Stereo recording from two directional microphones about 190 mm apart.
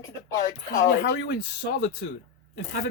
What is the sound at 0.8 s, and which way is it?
Speech, 60° left (ahead or behind).